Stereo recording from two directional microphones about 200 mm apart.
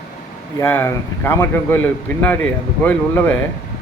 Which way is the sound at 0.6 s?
10° left (ahead or behind).